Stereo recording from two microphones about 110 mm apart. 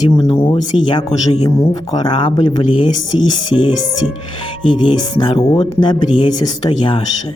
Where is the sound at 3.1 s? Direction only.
55° left (ahead or behind).